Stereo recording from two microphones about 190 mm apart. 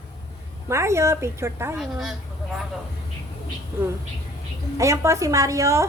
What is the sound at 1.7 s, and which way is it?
Speech, centre (ahead or behind).